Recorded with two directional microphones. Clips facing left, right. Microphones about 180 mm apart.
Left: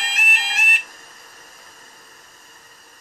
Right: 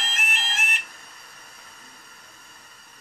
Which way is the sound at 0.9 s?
45° left (ahead or behind).